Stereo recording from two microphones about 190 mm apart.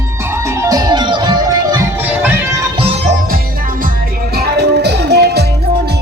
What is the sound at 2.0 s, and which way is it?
Music, 10° right (ahead or behind).